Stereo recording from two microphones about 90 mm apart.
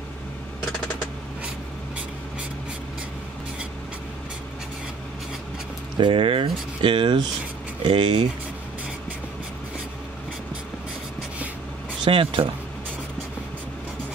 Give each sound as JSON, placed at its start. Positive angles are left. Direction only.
{"t": 5.9, "sound": "speech", "side_deg": -65}
{"t": 12.1, "sound": "speech", "side_deg": -75}